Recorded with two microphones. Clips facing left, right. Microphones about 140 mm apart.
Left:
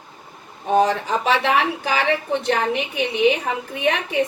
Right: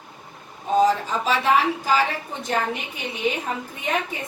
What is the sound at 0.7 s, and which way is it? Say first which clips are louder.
A woman's voice: left 1 dB; 70° left (ahead or behind).